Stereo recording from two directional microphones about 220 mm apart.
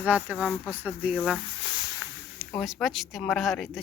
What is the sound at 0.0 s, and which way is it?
A woman's voice, 5° right (ahead or behind).